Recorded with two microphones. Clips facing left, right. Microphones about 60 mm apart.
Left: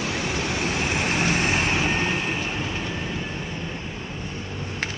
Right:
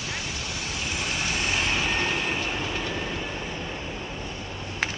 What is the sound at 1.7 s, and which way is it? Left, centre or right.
Vehicle, centre.